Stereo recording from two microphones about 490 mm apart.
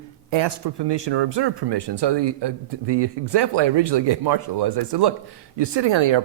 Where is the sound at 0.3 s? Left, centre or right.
Right.